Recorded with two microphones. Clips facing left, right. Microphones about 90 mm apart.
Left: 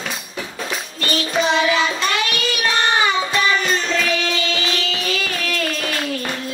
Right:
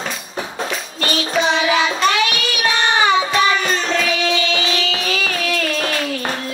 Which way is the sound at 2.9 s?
35° right (ahead or behind).